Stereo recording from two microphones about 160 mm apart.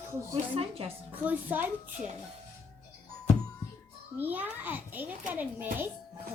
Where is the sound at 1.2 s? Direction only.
10° right (ahead or behind).